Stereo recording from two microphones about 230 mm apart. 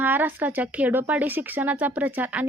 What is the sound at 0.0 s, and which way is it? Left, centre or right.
A woman's voice, centre.